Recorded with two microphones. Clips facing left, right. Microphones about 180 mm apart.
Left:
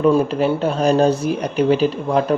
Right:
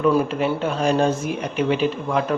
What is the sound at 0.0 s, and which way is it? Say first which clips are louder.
Speech: left 3 dB; 30° left (ahead or behind).